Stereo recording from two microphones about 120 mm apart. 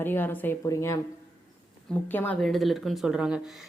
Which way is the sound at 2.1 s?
15° left (ahead or behind).